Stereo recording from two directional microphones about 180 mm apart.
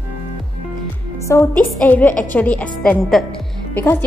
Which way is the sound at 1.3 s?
15° left (ahead or behind).